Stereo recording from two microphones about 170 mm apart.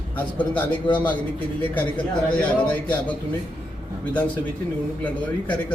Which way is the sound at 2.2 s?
10° left (ahead or behind).